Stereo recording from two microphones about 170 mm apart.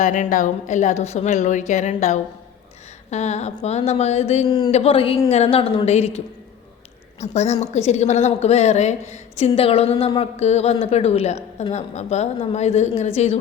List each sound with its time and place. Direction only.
0.0 s a woman's voice: 50° left (ahead or behind)
4.4 s speech: 25° left (ahead or behind)
4.7 s a woman's voice: 35° left (ahead or behind)